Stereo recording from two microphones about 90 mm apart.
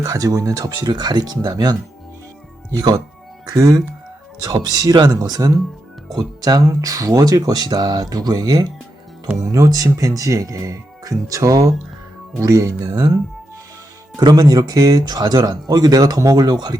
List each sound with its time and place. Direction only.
0.0 s speech: 40° right (ahead or behind)
2.7 s speech: 45° right (ahead or behind)
14.2 s speech: 50° right (ahead or behind)